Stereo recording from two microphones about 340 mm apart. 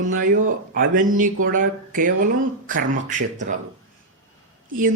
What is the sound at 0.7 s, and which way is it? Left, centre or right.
Speech, right.